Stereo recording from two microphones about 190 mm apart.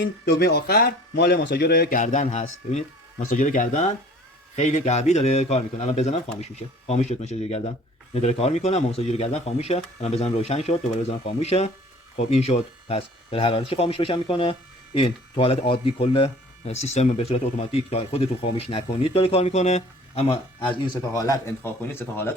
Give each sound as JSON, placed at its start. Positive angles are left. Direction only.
{"t": 0.0, "sound": "speech", "side_deg": 60}